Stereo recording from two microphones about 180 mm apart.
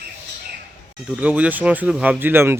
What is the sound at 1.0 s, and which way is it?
Speech, 10° right (ahead or behind).